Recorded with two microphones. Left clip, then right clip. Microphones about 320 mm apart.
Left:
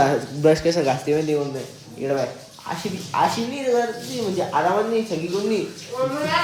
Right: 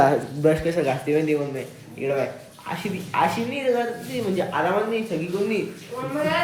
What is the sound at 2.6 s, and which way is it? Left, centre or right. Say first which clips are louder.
Speech: left 1 dB; centre.